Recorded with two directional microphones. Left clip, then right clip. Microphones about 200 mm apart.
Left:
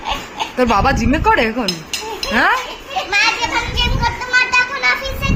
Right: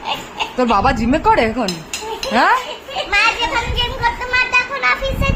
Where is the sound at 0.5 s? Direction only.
5° right (ahead or behind).